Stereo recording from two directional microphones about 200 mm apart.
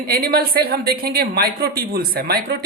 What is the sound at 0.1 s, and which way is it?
A woman's voice, 50° right (ahead or behind).